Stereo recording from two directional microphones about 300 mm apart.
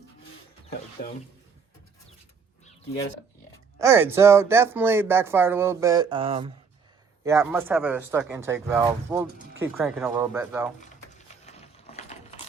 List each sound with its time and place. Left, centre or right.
1.0 s speech: left
3.8 s speech: centre
10.8 s a sound: left